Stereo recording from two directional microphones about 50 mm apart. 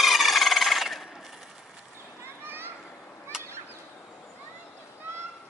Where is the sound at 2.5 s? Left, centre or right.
Right.